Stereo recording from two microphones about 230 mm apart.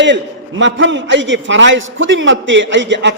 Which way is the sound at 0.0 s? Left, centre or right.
Right.